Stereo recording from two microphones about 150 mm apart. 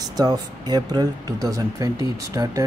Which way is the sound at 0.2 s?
25° right (ahead or behind).